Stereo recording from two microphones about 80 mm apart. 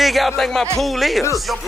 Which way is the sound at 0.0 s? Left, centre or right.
Centre.